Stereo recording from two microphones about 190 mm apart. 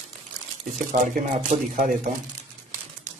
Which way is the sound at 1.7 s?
45° right (ahead or behind).